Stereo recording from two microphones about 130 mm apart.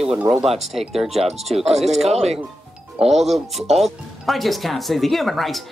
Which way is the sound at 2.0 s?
55° right (ahead or behind).